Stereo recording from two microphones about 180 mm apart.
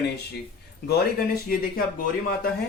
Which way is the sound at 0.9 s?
60° left (ahead or behind).